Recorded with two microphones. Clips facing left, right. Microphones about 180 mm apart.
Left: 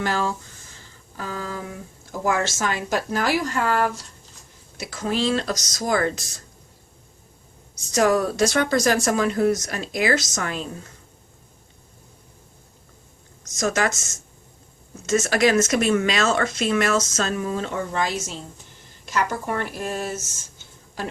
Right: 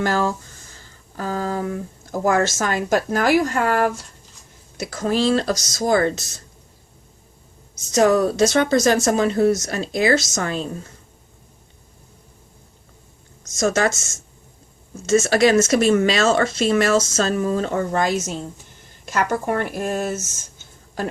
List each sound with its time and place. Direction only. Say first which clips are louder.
0.0 s a woman's voice: right 4 dB; 45° right (ahead or behind); by 6.4 s 25° right (ahead or behind)
7.9 s speech: right 3 dB; 25° right (ahead or behind)
13.6 s speech: right 4 dB; 30° right (ahead or behind)
15.0 s a woman's voice: right 4 dB; 30° right (ahead or behind); by 20.1 s 50° right (ahead or behind)